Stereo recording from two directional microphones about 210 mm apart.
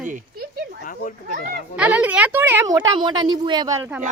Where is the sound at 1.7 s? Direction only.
5° right (ahead or behind).